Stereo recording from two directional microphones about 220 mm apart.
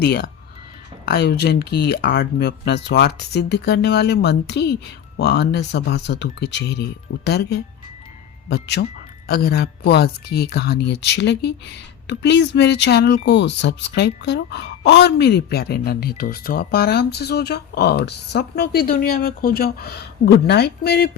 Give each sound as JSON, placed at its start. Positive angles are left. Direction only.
{"t": 0.0, "sound": "speech", "side_deg": 45}